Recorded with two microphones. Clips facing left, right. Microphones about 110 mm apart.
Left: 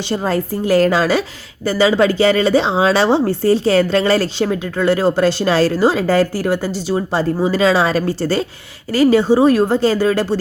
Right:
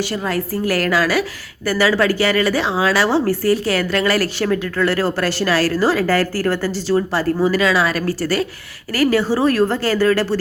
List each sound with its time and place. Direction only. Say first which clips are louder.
0.0 s speech: left 3 dB; 25° left (ahead or behind)